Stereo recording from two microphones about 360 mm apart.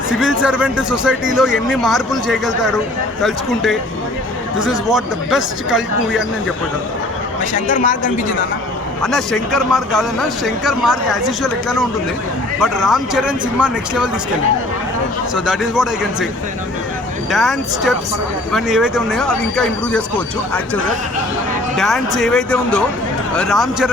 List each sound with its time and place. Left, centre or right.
0.2 s speech: centre
7.5 s speech: left
9.0 s speech: centre
12.5 s speech: centre
15.4 s speech: centre
17.3 s speech: centre
21.8 s speech: centre